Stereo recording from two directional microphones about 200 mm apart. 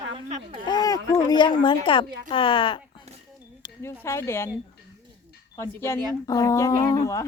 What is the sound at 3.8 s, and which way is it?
Speech, 10° left (ahead or behind).